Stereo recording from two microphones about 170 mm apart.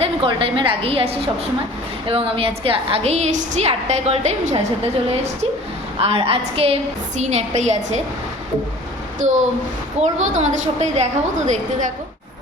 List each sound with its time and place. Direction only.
0.0 s a woman's voice: 30° right (ahead or behind)
6.0 s a woman's voice: 35° right (ahead or behind)
9.2 s a woman's voice: 45° right (ahead or behind)